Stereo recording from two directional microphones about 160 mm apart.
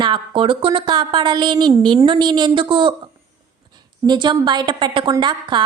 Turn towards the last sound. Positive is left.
turn(degrees=-30)  # may be behind; listen again after turning